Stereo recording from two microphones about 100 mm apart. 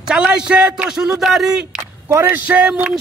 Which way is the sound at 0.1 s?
10° right (ahead or behind).